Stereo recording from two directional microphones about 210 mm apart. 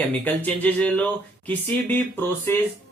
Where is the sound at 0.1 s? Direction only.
10° left (ahead or behind).